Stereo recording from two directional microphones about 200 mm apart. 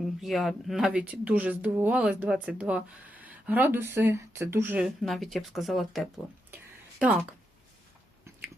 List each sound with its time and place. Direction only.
0.0 s speech: centre (ahead or behind)